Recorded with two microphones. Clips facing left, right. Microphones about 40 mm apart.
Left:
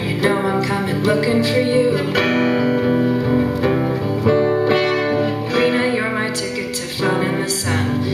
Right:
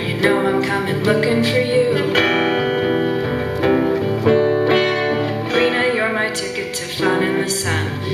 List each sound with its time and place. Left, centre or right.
0.2 s music: right
1.1 s music: right
3.7 s music: right
4.3 s music: right
5.5 s music: right
7.0 s music: right